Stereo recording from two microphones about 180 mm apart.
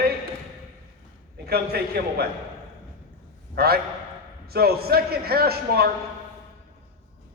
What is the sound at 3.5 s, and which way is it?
A man's voice, 60° right (ahead or behind).